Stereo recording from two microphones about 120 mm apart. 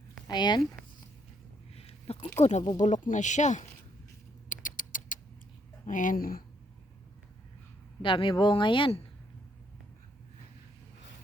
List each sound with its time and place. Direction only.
0.3 s speech: 35° left (ahead or behind)
1.7 s a sound: 55° left (ahead or behind)
2.4 s speech: 75° left (ahead or behind)
2.7 s speech: 90° left
4.4 s rodents: 90° left
5.8 s speech: 90° left
8.0 s a woman's voice: 45° left (ahead or behind)